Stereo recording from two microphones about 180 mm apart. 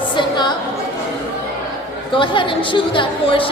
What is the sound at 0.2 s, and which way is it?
Music, 25° left (ahead or behind).